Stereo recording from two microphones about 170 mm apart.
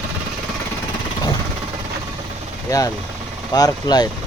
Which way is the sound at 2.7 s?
20° left (ahead or behind).